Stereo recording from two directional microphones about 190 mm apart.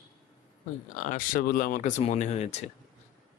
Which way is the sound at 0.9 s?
40° left (ahead or behind).